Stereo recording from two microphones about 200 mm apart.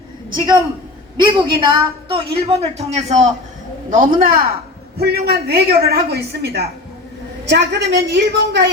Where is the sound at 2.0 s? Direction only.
30° right (ahead or behind).